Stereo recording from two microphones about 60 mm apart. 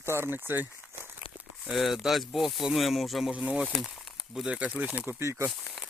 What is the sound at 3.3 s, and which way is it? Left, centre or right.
Speech, centre.